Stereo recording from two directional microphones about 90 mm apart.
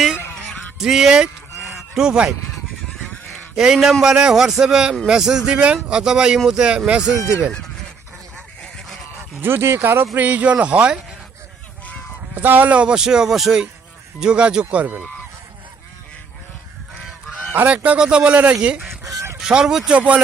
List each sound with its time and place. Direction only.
0.3 s honk: 5° right (ahead or behind)
3.5 s a man's voice: 5° right (ahead or behind)
7.2 s speech: 30° left (ahead or behind)
8.6 s goose: 10° left (ahead or behind)
9.4 s speech: 25° right (ahead or behind)
12.3 s speech: 20° right (ahead or behind)
17.5 s speech: 20° right (ahead or behind)
19.0 s goose: 35° right (ahead or behind)
19.4 s speech: 10° right (ahead or behind)